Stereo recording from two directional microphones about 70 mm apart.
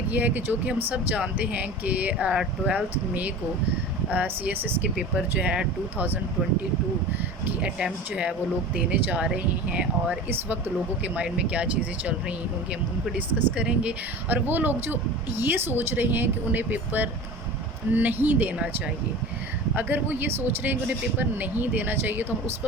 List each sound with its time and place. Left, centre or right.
0.1 s a man's voice: right
7.6 s speech: centre
13.1 s speech: centre
14.4 s a man's voice: right
19.7 s a man's voice: right